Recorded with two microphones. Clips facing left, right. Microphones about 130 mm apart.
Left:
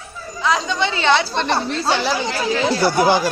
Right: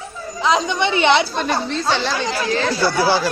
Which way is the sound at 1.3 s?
5° right (ahead or behind).